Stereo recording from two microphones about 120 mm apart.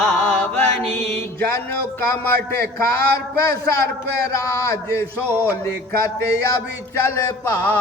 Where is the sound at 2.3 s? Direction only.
20° left (ahead or behind).